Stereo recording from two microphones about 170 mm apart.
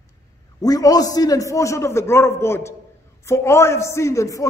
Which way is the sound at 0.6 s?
20° left (ahead or behind).